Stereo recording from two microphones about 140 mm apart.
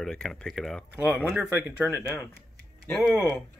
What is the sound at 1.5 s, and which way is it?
Speech, 10° right (ahead or behind).